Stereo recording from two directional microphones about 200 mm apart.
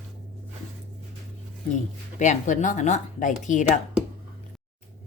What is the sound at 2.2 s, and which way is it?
Speech, 35° left (ahead or behind).